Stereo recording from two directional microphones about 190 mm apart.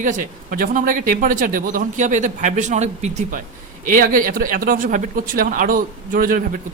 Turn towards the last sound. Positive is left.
turn(degrees=-50)  # may be behind; listen again after turning